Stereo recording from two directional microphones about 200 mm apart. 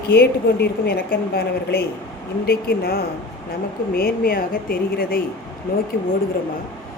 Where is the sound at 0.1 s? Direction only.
55° left (ahead or behind).